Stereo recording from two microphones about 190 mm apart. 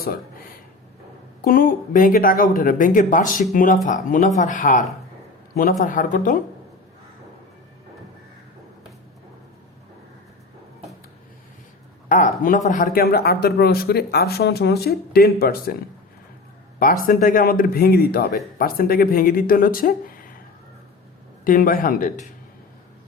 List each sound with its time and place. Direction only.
1.5 s speech: 50° left (ahead or behind)
5.8 s speech: 45° left (ahead or behind)
12.0 s a sound: 40° left (ahead or behind)
12.4 s speech: 45° left (ahead or behind)
16.8 s speech: 45° left (ahead or behind)
21.4 s speech: 50° left (ahead or behind)